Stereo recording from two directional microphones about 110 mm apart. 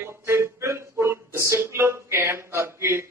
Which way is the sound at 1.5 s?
25° right (ahead or behind).